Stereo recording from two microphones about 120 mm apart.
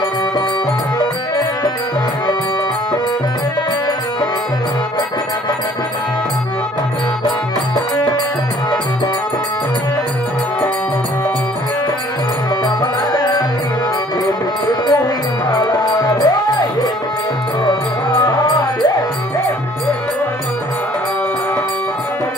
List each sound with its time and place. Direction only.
12.6 s music: 35° left (ahead or behind)